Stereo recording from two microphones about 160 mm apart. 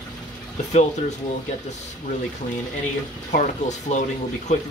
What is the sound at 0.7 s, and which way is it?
Speech, 45° left (ahead or behind).